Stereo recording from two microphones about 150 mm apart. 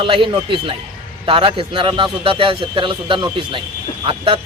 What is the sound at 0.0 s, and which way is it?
Speech, 35° right (ahead or behind).